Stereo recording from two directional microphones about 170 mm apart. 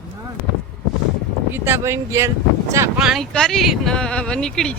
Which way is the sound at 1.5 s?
15° right (ahead or behind).